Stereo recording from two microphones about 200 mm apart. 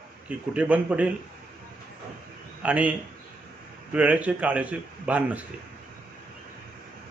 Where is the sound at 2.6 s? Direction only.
5° right (ahead or behind).